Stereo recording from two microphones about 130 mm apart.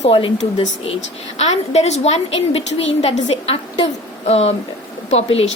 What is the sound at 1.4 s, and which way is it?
A woman's voice, 60° left (ahead or behind).